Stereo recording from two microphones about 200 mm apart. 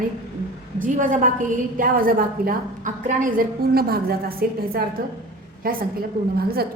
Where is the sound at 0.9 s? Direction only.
40° right (ahead or behind).